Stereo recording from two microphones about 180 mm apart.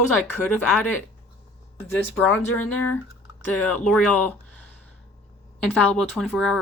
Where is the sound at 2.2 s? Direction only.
10° left (ahead or behind).